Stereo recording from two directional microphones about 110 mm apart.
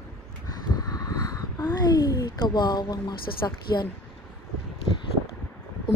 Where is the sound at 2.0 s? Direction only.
40° left (ahead or behind).